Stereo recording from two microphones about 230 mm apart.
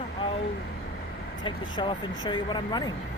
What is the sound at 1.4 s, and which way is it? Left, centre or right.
Speech, left.